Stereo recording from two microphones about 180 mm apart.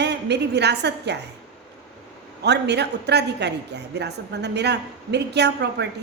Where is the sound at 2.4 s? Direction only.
70° right (ahead or behind).